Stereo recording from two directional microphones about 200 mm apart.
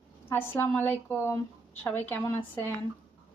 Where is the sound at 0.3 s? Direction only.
10° left (ahead or behind).